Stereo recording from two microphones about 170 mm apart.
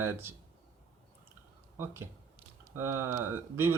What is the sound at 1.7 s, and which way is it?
Speech, 15° right (ahead or behind).